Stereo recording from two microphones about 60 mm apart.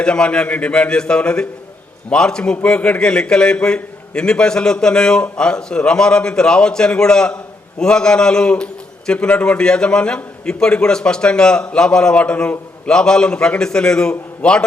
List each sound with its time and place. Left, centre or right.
0.0 s a man's voice: centre